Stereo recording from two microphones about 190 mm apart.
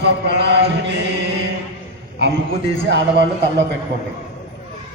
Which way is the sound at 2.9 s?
65° right (ahead or behind).